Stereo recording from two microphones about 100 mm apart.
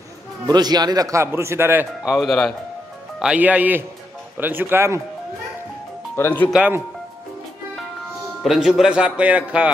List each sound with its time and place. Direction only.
0.5 s speech: 45° right (ahead or behind); by 1.9 s 25° right (ahead or behind)
2.0 s speech: centre (ahead or behind)
3.2 s speech: 10° right (ahead or behind)
6.1 s speech: 20° left (ahead or behind)
8.4 s speech: 5° right (ahead or behind)